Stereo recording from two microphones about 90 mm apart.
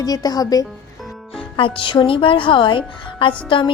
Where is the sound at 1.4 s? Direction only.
75° left (ahead or behind).